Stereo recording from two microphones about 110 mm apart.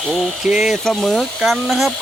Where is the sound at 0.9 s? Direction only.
5° left (ahead or behind).